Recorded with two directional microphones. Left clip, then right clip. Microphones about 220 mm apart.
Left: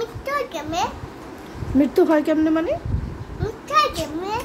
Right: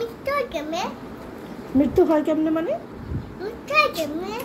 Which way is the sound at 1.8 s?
15° left (ahead or behind).